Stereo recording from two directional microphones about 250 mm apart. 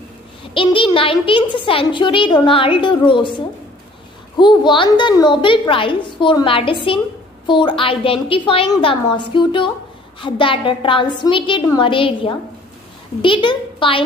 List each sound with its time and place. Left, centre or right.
0.6 s a child's voice: left